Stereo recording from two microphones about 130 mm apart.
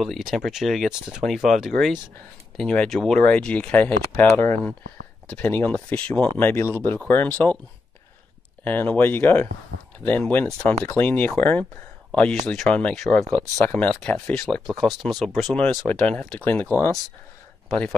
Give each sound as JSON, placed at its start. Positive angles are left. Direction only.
{"t": 0.0, "sound": "speech", "side_deg": 0}
{"t": 8.6, "sound": "speech", "side_deg": 15}
{"t": 17.6, "sound": "speech", "side_deg": 10}